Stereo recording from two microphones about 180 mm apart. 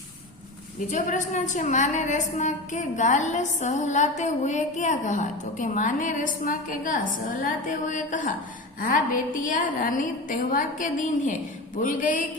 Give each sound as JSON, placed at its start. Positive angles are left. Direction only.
{"t": 0.9, "sound": "a woman's voice", "side_deg": 45}